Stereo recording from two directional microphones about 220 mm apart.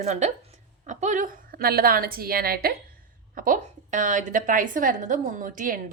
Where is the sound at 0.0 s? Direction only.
30° right (ahead or behind).